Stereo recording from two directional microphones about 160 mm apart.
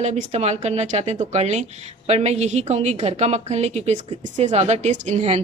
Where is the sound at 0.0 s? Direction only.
45° right (ahead or behind).